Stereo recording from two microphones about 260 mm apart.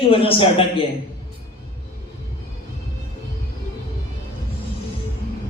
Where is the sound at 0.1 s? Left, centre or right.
Left.